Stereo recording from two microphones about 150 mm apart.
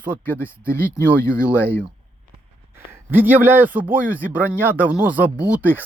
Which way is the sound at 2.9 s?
15° right (ahead or behind).